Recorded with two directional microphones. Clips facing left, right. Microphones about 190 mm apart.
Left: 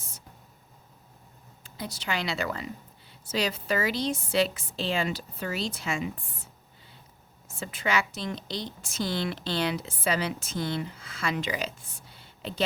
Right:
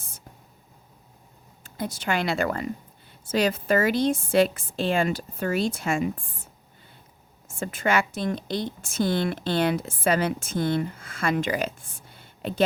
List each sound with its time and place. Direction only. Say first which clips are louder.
1.6 s a woman's voice: right 6 dB; 50° right (ahead or behind)